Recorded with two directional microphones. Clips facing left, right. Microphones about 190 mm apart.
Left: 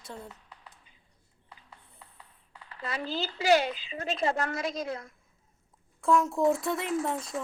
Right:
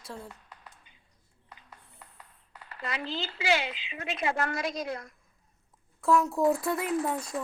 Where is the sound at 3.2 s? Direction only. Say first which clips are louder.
Left 6 dB; 40° left (ahead or behind).